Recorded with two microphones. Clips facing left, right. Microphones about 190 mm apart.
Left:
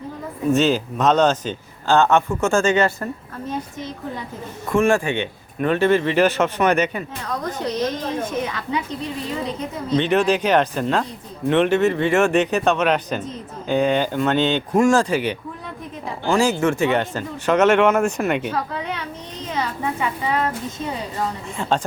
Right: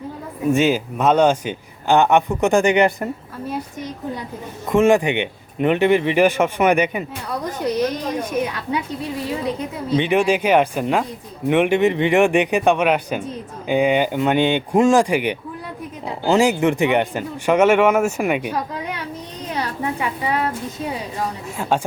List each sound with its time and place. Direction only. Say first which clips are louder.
0.5 s a man's voice: even; 10° right (ahead or behind)
9.9 s a man's voice: right 1 dB; 10° right (ahead or behind)
21.6 s a man's voice: right 1 dB; 5° right (ahead or behind)